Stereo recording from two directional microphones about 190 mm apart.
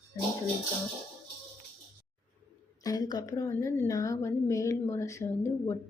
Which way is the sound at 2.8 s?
20° left (ahead or behind).